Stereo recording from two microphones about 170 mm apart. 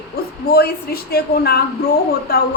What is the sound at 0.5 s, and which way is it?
A woman's voice, 65° left (ahead or behind).